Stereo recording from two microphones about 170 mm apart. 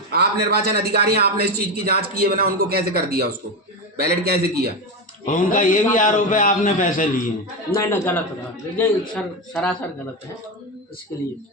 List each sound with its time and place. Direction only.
0.1 s a man's voice: 70° right (ahead or behind)
5.2 s a man's voice: 50° left (ahead or behind)
7.7 s a man's voice: 15° left (ahead or behind)
11.1 s a man's voice: 15° left (ahead or behind)